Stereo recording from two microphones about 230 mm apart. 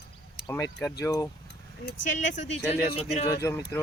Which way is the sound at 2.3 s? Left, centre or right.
Left.